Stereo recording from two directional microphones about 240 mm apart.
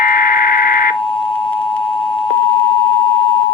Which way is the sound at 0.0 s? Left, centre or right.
Left.